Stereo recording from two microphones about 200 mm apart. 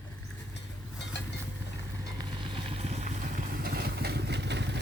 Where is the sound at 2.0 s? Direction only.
25° right (ahead or behind).